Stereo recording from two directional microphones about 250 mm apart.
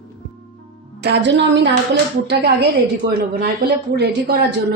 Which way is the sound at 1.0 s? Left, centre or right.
Right.